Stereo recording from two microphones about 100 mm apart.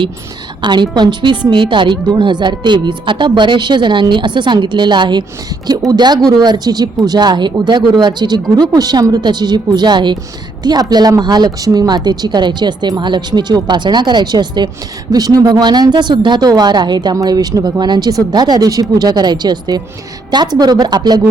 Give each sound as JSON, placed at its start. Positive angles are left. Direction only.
{"t": 0.6, "sound": "speech", "side_deg": -50}
{"t": 5.6, "sound": "speech", "side_deg": -40}